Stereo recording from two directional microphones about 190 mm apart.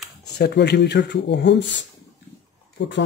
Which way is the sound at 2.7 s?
70° left (ahead or behind).